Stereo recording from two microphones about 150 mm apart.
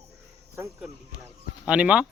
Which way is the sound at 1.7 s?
5° right (ahead or behind).